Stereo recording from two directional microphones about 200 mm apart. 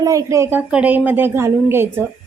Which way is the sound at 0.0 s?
15° right (ahead or behind).